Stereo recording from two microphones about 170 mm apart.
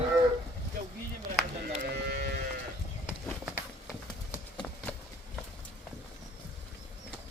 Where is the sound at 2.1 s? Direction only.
70° right (ahead or behind).